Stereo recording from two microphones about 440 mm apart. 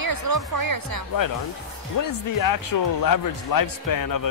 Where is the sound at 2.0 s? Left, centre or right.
Left.